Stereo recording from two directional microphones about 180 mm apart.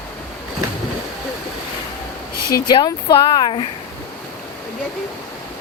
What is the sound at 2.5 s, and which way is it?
Speech, 25° left (ahead or behind).